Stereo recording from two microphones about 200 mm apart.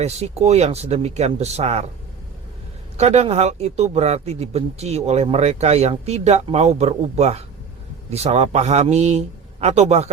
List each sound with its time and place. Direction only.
0.0 s speech: 30° right (ahead or behind)
3.0 s speech: 30° right (ahead or behind)